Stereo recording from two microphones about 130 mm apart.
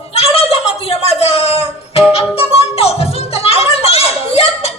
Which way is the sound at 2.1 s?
50° left (ahead or behind).